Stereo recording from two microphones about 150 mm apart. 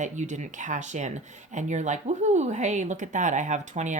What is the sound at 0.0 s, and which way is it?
Speech, 55° right (ahead or behind).